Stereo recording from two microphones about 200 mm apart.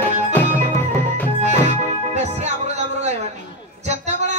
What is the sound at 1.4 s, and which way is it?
Music, 35° right (ahead or behind).